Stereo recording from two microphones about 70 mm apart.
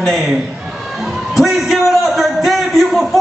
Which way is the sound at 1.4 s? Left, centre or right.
Centre.